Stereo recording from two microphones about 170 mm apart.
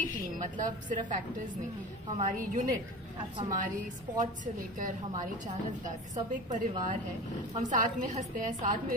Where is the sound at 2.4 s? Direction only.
50° right (ahead or behind).